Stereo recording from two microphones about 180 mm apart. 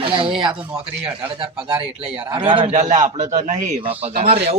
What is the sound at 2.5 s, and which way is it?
Speech, 30° right (ahead or behind).